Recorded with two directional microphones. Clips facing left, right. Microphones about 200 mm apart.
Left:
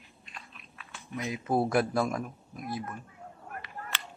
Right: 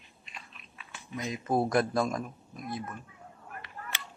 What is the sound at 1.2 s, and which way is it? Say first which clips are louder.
A man's voice: even; centre (ahead or behind).